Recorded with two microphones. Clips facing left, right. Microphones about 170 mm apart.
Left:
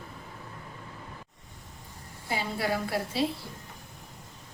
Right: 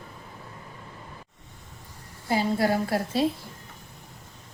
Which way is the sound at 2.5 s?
40° right (ahead or behind).